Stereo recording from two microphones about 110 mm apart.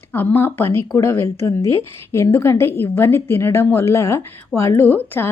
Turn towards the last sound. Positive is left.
turn(degrees=20)  # may be behind; listen again after turning